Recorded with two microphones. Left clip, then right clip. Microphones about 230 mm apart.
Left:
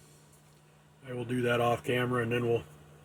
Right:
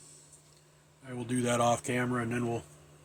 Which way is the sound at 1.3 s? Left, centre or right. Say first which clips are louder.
Even; right.